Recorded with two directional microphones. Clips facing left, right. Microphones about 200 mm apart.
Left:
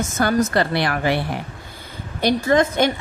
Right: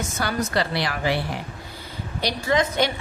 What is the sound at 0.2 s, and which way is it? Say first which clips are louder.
A woman's voice: left 6 dB; 50° left (ahead or behind).